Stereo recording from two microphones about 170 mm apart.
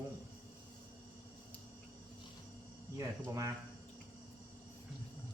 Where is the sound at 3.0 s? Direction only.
20° right (ahead or behind).